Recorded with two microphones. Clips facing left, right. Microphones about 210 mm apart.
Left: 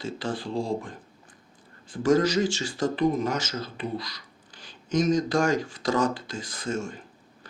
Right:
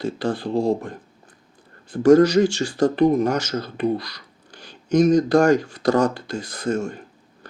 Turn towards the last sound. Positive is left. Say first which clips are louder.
# right 7 dB
turn(degrees=-65)  # may be behind; listen again after turning